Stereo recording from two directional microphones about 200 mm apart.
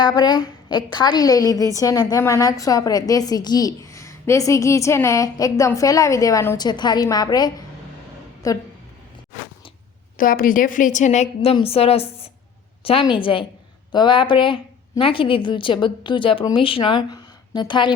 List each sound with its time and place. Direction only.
0.0 s a woman's voice: 20° left (ahead or behind)
10.2 s a woman's voice: 45° left (ahead or behind); by 17.9 s 20° left (ahead or behind)